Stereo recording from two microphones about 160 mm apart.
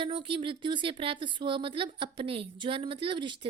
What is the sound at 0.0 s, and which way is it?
Speech, 30° right (ahead or behind).